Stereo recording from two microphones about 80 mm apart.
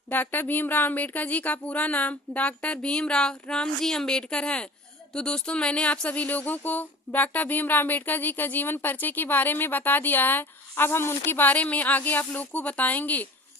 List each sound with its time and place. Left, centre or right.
0.1 s speech: left